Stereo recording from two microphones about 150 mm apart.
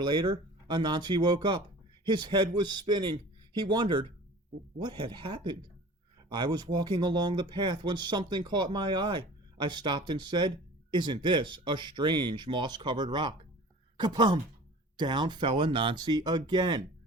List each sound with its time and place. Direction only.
0.0 s speech: 35° right (ahead or behind)